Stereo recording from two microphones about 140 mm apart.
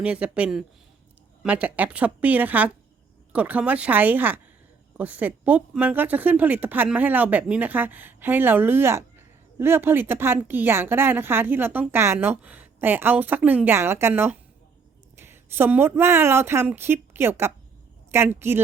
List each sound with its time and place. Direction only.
0.0 s a woman's voice: 10° right (ahead or behind)